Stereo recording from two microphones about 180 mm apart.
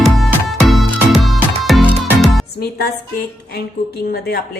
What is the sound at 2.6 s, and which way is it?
Music, 60° left (ahead or behind).